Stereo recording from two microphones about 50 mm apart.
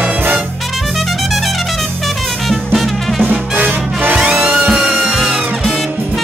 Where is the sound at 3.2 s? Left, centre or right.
Right.